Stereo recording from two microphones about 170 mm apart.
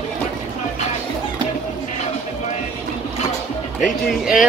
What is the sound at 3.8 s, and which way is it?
Speech, 5° right (ahead or behind).